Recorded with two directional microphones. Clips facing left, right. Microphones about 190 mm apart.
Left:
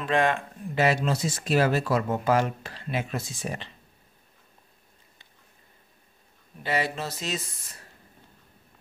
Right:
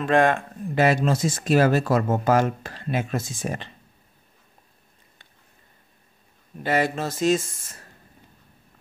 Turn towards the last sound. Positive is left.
turn(degrees=-50)  # may be behind; listen again after turning